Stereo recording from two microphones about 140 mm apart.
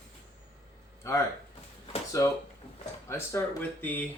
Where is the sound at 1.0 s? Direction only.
20° left (ahead or behind).